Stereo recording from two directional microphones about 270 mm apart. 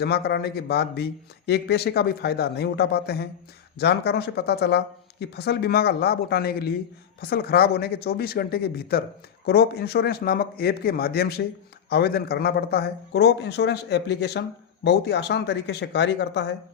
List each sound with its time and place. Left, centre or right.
0.0 s a man's voice: left